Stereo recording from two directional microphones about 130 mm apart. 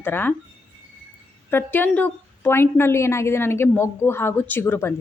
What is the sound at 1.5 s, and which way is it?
A woman's voice, 15° left (ahead or behind).